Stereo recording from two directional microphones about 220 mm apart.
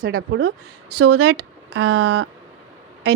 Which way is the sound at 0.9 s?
90° right.